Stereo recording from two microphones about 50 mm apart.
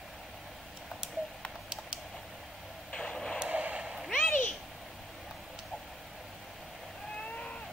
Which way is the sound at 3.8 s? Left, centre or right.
Centre.